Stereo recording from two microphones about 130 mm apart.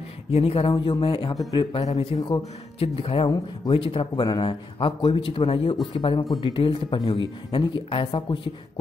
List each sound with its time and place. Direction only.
0.3 s speech: 50° left (ahead or behind)
0.7 s speech: 35° left (ahead or behind)
1.3 s speech: 30° left (ahead or behind)
1.8 s speech: 55° left (ahead or behind)
2.1 s speech: 35° left (ahead or behind)
2.8 s speech: 45° left (ahead or behind)